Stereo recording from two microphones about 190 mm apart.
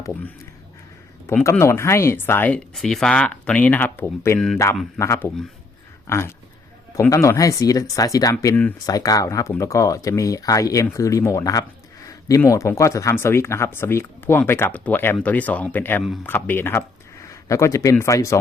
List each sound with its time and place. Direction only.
1.3 s speech: 10° left (ahead or behind)